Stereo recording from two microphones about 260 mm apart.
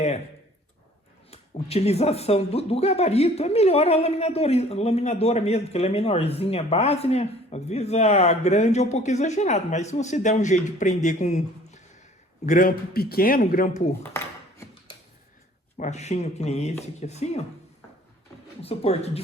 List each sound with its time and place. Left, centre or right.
1.3 s a man's voice: left
15.8 s speech: left
18.6 s speech: left